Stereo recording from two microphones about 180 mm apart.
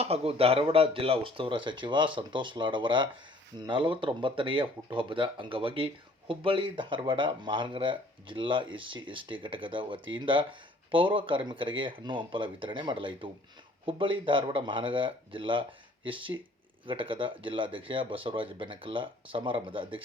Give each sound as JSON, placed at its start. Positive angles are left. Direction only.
{"t": 0.0, "sound": "speech", "side_deg": -35}